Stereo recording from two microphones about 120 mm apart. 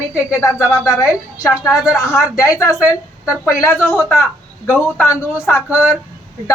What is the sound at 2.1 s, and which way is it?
A woman's voice, 25° left (ahead or behind).